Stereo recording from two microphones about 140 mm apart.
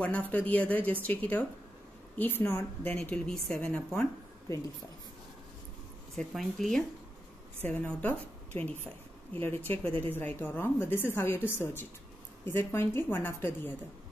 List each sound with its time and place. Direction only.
0.3 s a woman's voice: 10° left (ahead or behind)
6.1 s a woman's voice: centre (ahead or behind)